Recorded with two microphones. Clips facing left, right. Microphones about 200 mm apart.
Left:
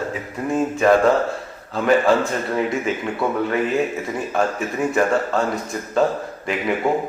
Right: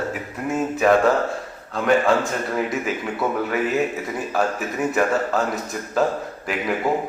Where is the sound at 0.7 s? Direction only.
5° right (ahead or behind).